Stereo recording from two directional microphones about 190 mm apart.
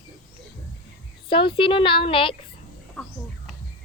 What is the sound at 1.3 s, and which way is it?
Speech, 25° left (ahead or behind).